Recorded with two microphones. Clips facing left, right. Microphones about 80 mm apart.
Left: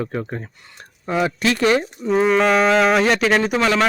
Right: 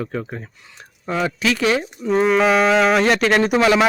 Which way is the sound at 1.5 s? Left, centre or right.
Centre.